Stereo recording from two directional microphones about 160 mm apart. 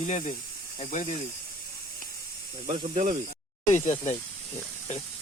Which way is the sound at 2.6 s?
45° right (ahead or behind).